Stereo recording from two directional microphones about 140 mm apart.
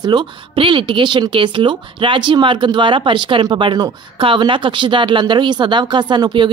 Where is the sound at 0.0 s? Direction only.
35° right (ahead or behind).